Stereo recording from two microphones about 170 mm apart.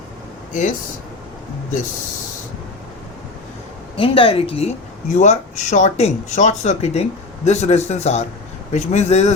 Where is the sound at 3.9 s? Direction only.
30° left (ahead or behind).